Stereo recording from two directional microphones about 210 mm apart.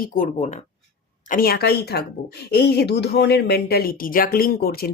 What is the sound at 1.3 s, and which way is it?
Speech, 45° left (ahead or behind).